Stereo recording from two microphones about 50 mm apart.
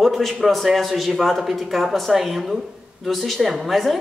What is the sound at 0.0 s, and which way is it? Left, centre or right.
A man's voice, centre.